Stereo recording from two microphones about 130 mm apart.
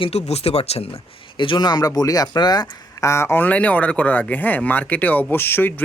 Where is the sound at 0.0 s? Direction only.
55° left (ahead or behind).